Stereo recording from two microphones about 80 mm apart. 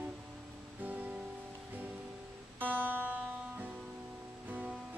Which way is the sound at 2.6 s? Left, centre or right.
Right.